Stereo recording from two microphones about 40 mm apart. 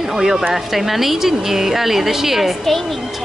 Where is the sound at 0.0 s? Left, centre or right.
Centre.